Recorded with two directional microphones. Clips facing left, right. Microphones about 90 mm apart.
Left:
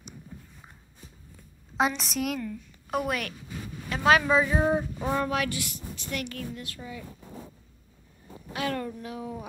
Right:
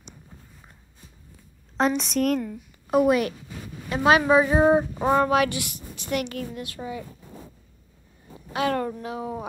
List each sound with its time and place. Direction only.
1.8 s a woman's voice: 5° left (ahead or behind)
4.5 s a woman's voice: 30° right (ahead or behind)
4.9 s a sound: 55° right (ahead or behind)
5.7 s a woman's voice: 15° right (ahead or behind)
6.8 s speech: 40° right (ahead or behind)
7.1 s a sound: 5° left (ahead or behind)
8.7 s speech: 50° right (ahead or behind)
9.0 s speech: 90° right